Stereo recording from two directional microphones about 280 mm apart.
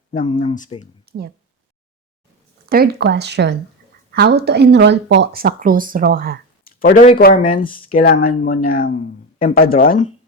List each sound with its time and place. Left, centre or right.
0.1 s speech: left
1.1 s a sound: right
2.6 s speech: right
6.7 s speech: left